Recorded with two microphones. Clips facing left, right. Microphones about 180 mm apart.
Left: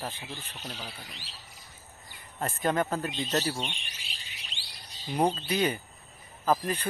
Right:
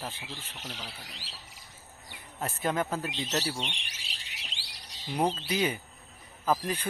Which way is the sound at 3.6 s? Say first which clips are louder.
Left 1 dB; 80° right.